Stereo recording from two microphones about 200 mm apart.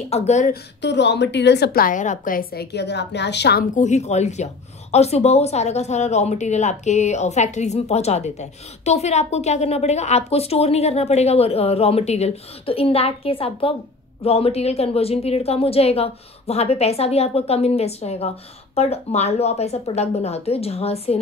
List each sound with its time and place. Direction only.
0.1 s speech: 35° left (ahead or behind)
0.5 s a woman's voice: 60° left (ahead or behind)
3.7 s speech: 35° left (ahead or behind)